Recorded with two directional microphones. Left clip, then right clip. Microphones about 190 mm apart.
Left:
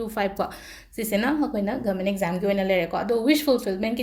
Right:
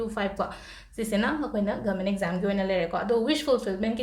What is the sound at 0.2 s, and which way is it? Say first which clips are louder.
A woman's voice: left 7 dB; 40° left (ahead or behind).